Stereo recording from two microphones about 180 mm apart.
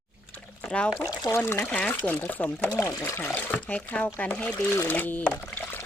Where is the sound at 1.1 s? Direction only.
20° left (ahead or behind).